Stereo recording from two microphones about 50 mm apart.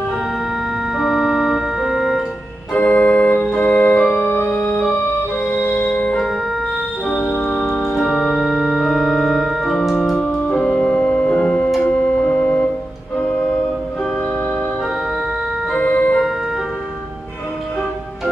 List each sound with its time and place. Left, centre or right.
0.9 s organ: centre
2.7 s organ: left
5.4 s music: left
7.8 s organ: centre
10.5 s organ: centre
15.8 s organ: left